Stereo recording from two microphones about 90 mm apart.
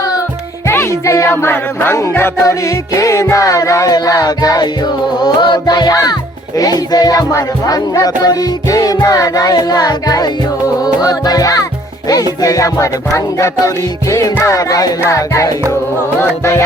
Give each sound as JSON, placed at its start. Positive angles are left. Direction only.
{"t": 0.7, "sound": "music", "side_deg": 30}